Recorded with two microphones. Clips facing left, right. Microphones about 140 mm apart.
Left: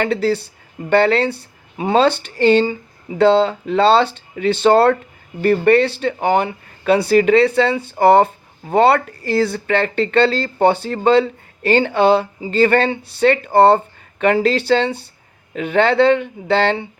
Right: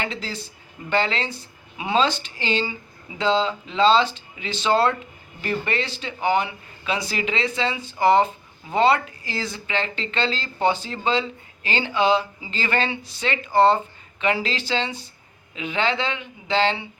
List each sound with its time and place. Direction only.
0.0 s speech: 60° left (ahead or behind)
1.7 s speech: 45° left (ahead or behind)
2.0 s speech: 60° left (ahead or behind)